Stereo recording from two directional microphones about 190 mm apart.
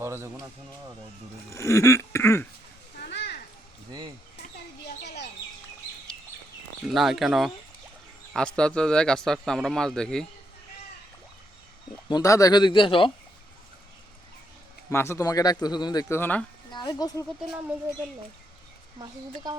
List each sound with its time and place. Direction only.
0.0 s speech: 15° right (ahead or behind)
1.5 s speech: 15° left (ahead or behind)
3.0 s children playing: 60° left (ahead or behind)
5.0 s bird: 60° left (ahead or behind)
6.8 s speech: centre (ahead or behind)
8.5 s speech: 5° left (ahead or behind)
12.0 s speech: 20° left (ahead or behind)
14.8 s speech: 15° left (ahead or behind)
16.7 s speech: 20° left (ahead or behind)
18.9 s speech: 20° right (ahead or behind)